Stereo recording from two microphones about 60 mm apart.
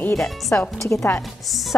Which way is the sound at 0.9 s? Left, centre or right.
Left.